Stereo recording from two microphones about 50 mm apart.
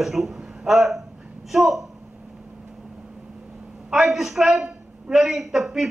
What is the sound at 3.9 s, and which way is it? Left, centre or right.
A man's voice, centre.